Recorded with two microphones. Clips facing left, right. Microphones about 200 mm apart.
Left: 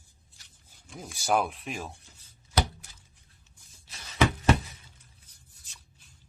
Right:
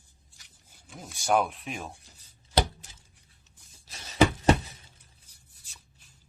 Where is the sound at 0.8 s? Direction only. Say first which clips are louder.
Right 1 dB; centre (ahead or behind).